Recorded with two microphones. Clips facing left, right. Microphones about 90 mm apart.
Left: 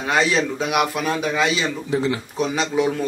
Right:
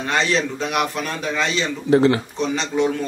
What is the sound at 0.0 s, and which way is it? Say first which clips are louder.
Speech: left 1 dB; 5° left (ahead or behind).